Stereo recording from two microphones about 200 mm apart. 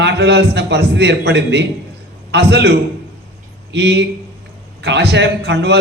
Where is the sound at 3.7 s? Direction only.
60° right (ahead or behind).